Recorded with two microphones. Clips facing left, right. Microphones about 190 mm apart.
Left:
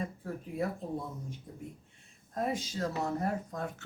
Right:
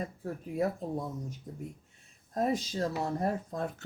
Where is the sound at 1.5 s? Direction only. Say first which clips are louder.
Right 3 dB; 45° right (ahead or behind).